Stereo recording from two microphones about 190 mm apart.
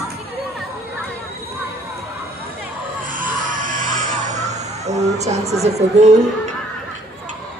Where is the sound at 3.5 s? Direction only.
45° right (ahead or behind).